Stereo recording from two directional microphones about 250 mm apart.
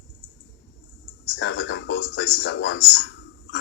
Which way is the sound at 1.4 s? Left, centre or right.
Left.